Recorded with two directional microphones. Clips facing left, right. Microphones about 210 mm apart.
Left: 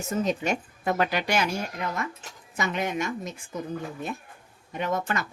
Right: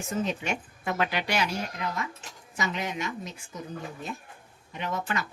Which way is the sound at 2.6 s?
55° left (ahead or behind).